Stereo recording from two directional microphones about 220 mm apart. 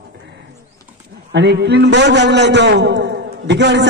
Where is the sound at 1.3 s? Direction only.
50° right (ahead or behind).